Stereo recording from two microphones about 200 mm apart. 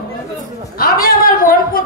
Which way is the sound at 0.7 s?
45° left (ahead or behind).